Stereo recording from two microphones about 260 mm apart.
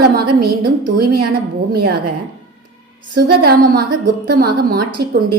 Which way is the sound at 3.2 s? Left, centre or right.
Right.